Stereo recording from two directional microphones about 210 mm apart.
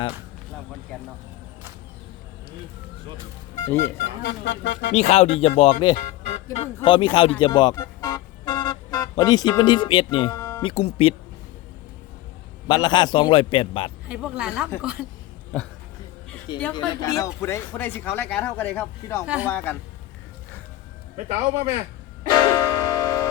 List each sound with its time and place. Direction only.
4.2 s speech: 55° left (ahead or behind)
4.9 s a man's voice: 30° left (ahead or behind)
12.6 s a man's voice: 20° left (ahead or behind)
14.1 s speech: 5° right (ahead or behind)
15.5 s speech: 5° left (ahead or behind)
16.7 s speech: 15° left (ahead or behind)
19.2 s speech: 5° right (ahead or behind)
19.5 s speech: 10° left (ahead or behind)
21.2 s speech: 35° right (ahead or behind)
22.3 s music: 20° left (ahead or behind)